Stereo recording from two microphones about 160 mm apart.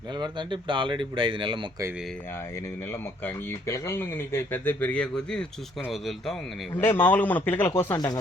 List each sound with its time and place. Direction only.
0.1 s speech: 30° right (ahead or behind)
2.9 s speech: 15° left (ahead or behind); by 6.3 s centre (ahead or behind)
6.7 s speech: 10° left (ahead or behind)
7.9 s speech: 25° left (ahead or behind)